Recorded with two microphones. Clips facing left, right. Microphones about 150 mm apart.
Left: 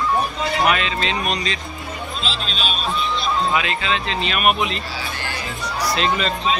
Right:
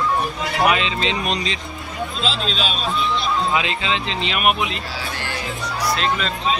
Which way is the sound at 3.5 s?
25° right (ahead or behind).